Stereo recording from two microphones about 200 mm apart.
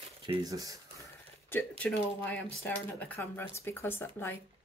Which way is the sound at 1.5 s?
5° left (ahead or behind).